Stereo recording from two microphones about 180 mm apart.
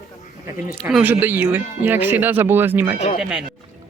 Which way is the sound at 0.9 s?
5° right (ahead or behind).